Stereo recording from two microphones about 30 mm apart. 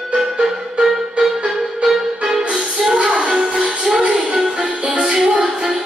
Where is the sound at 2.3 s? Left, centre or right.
Right.